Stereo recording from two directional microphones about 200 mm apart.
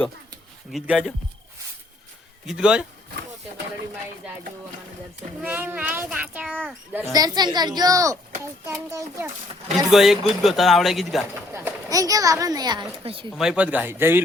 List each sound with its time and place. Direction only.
0.7 s speech: centre (ahead or behind)
2.5 s speech: 5° right (ahead or behind)
5.4 s child singing: 10° right (ahead or behind)
6.5 s speech: 5° left (ahead or behind)
6.9 s speech: 15° right (ahead or behind)
8.6 s child singing: 15° right (ahead or behind)
9.7 s speech: centre (ahead or behind)
11.5 s speech: 15° right (ahead or behind)
13.3 s child singing: 5° right (ahead or behind)